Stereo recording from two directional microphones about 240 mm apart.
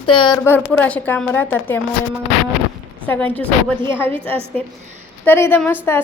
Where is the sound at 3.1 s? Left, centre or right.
Centre.